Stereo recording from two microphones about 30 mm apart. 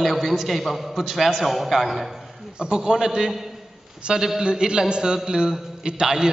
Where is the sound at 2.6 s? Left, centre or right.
Right.